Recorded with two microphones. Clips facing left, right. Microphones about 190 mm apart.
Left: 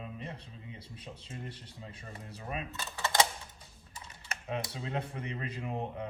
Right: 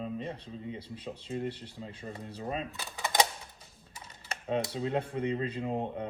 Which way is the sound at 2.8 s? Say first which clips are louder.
Even; 15° right (ahead or behind).